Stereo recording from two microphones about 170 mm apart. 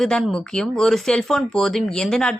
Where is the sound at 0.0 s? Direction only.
5° left (ahead or behind).